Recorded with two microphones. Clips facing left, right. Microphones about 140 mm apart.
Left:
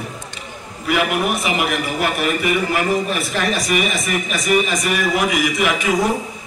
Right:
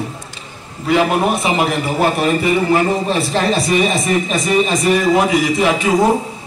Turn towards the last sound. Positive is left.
turn(degrees=-30)  # may be behind; listen again after turning